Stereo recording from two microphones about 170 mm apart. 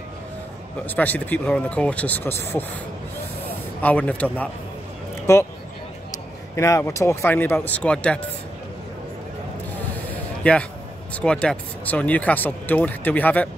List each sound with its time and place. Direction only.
0.8 s speech: 10° left (ahead or behind)
3.8 s speech: 5° left (ahead or behind)
6.5 s speech: 15° left (ahead or behind)
10.4 s speech: 5° left (ahead or behind)